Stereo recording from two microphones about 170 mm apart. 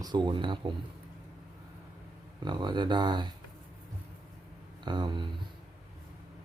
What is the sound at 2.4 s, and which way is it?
Speech, 25° right (ahead or behind).